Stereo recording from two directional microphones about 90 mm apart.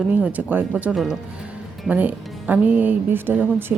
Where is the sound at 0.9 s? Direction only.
Centre (ahead or behind).